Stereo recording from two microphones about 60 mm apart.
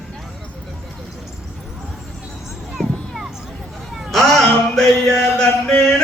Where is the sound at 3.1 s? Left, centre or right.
Centre.